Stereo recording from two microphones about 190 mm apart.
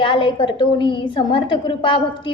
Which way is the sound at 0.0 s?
25° left (ahead or behind).